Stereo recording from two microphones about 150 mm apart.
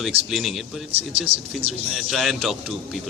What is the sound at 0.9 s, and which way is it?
Speech, 40° right (ahead or behind).